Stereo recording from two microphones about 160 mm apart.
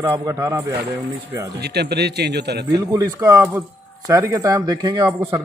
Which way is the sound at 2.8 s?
20° right (ahead or behind).